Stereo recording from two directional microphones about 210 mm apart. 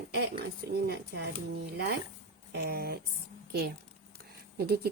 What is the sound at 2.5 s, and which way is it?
Speech, 50° right (ahead or behind).